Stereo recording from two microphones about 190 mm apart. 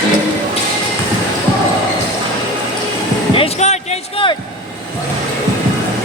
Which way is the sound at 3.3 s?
35° left (ahead or behind).